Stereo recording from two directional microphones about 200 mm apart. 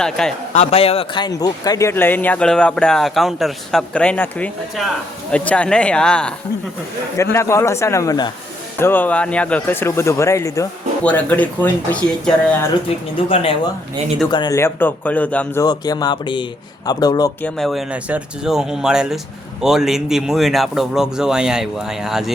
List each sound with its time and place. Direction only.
0.0 s speech: 5° left (ahead or behind)
0.5 s speech: 30° left (ahead or behind); by 6.3 s 5° left (ahead or behind)
7.3 s speech: 15° left (ahead or behind)
13.2 s speech: 25° left (ahead or behind); by 15.6 s 5° left (ahead or behind)
15.6 s speech: 20° left (ahead or behind)
17.4 s speech: centre (ahead or behind)